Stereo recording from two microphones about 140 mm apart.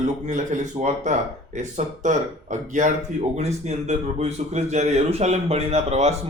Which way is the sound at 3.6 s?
50° right (ahead or behind).